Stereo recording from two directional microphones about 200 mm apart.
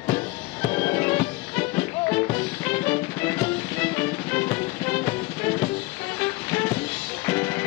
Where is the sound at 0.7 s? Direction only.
10° left (ahead or behind).